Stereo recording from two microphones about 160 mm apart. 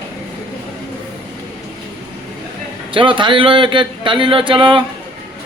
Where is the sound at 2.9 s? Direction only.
30° right (ahead or behind).